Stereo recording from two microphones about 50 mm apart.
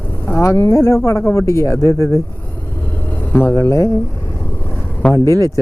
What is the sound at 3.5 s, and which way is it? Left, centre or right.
Speech, left.